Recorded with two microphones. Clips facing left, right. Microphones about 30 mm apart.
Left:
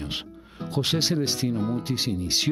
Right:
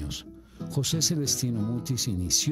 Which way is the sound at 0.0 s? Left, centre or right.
Left.